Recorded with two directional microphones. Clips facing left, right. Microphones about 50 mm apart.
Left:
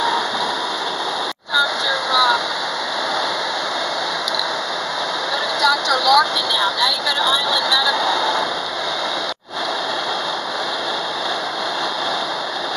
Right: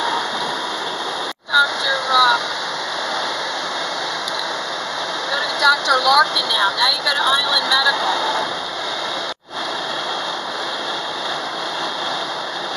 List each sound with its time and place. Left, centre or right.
1.9 s vehicle: centre
5.6 s speech: centre
6.8 s speech: right
8.0 s a sound: centre